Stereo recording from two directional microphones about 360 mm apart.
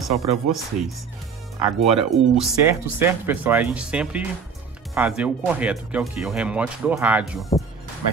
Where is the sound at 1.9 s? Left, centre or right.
Centre.